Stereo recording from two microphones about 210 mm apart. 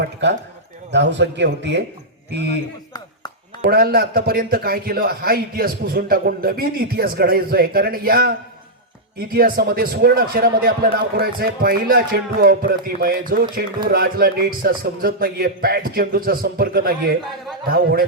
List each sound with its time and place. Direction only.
0.0 s a man's voice: 55° right (ahead or behind)
3.6 s a man's voice: 45° right (ahead or behind)